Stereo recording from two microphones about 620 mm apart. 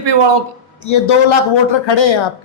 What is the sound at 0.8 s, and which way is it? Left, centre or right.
Speech, left.